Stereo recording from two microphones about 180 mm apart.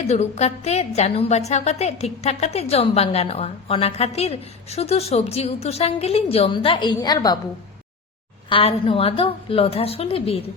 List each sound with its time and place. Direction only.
0.1 s a woman's voice: 35° left (ahead or behind)
8.4 s a woman's voice: 30° left (ahead or behind)